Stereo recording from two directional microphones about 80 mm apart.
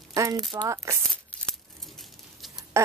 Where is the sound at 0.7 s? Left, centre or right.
Right.